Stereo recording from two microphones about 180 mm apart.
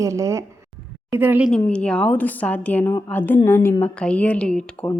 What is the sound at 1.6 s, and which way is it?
A woman's voice, 5° left (ahead or behind).